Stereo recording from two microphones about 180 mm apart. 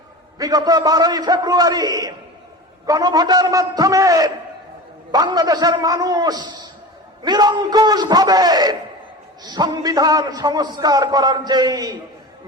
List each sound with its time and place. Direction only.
0.3 s a man's voice: 20° right (ahead or behind)